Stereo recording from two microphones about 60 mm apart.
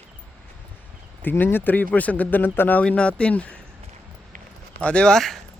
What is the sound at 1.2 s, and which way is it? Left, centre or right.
Speech, left.